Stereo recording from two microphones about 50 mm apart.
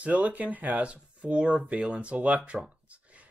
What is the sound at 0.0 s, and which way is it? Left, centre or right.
Speech, right.